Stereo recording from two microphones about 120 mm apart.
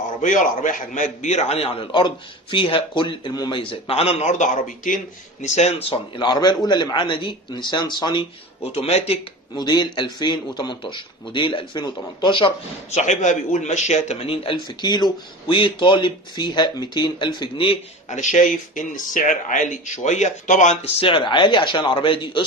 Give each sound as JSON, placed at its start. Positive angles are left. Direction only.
{"t": 0.2, "sound": "a man's voice", "side_deg": 90}
{"t": 4.3, "sound": "speech", "side_deg": 90}
{"t": 5.4, "sound": "speech", "side_deg": 75}
{"t": 6.1, "sound": "a man's voice", "side_deg": 35}
{"t": 8.7, "sound": "speech", "side_deg": 60}
{"t": 9.6, "sound": "a man's voice", "side_deg": 35}
{"t": 12.9, "sound": "a man's voice", "side_deg": 80}
{"t": 18.1, "sound": "speech", "side_deg": 90}
{"t": 21.0, "sound": "a man's voice", "side_deg": 45}